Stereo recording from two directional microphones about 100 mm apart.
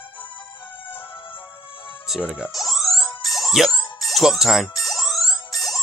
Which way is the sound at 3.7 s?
45° left (ahead or behind).